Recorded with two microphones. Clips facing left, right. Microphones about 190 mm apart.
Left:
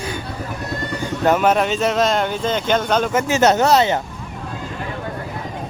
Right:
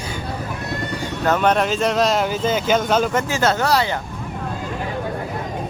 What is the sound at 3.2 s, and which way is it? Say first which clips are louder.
Speech: left 4 dB; 20° left (ahead or behind).